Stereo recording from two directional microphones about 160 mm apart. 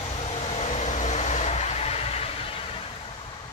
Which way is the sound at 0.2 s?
40° left (ahead or behind).